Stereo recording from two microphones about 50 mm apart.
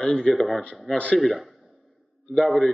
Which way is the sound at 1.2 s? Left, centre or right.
Centre.